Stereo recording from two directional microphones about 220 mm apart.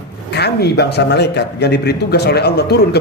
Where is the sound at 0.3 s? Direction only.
50° left (ahead or behind).